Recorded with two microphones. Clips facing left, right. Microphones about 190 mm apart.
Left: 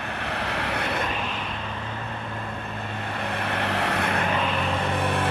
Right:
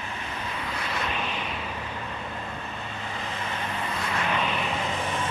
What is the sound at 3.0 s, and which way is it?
Vehicle, 60° left (ahead or behind).